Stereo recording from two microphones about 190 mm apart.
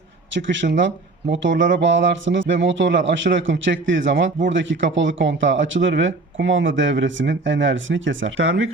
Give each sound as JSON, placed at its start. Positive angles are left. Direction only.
{"t": 0.3, "sound": "speech", "side_deg": -75}